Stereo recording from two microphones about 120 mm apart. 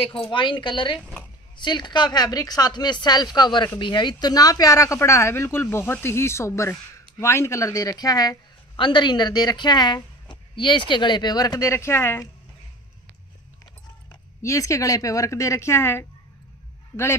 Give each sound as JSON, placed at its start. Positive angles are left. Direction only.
{"t": 0.0, "sound": "a woman's voice", "side_deg": 50}
{"t": 14.4, "sound": "speech", "side_deg": 25}